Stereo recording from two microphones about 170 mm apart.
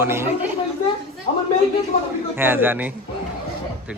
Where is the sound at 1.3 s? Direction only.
30° left (ahead or behind).